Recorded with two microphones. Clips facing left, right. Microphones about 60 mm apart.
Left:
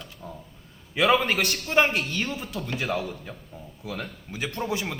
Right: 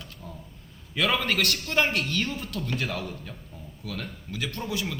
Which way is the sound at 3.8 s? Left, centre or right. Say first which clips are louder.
Left 2 dB; centre.